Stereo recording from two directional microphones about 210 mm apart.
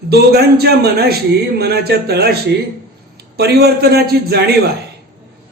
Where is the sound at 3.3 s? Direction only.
50° right (ahead or behind).